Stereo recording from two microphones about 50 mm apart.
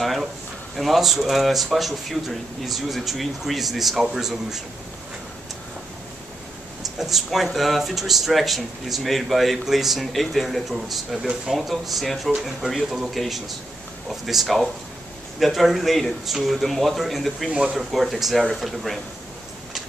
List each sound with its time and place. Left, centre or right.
0.0 s a sound: centre
0.7 s speech: centre
7.0 s speech: centre
17.5 s speech: centre
17.7 s speech: centre